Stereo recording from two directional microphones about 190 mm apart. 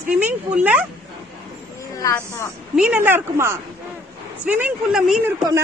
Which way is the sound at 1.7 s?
15° left (ahead or behind).